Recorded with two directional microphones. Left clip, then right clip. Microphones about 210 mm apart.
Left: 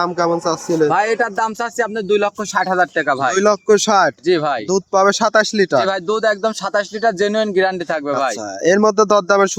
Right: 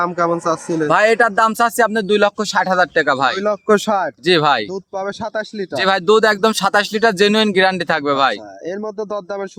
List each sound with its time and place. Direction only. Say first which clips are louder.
0.0 s speech: even; 10° right (ahead or behind)
0.9 s speech: right 7 dB; 50° right (ahead or behind)
2.4 s speech: right 1 dB; 35° right (ahead or behind)
3.3 s speech: left 5 dB; 15° left (ahead or behind)
4.3 s speech: right 3 dB; 55° right (ahead or behind)
4.7 s speech: left 10 dB; 30° left (ahead or behind)
5.8 s speech: right 4 dB; 55° right (ahead or behind)
8.6 s speech: left 14 dB; 40° left (ahead or behind)